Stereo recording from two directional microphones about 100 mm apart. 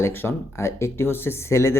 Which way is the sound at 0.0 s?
25° left (ahead or behind).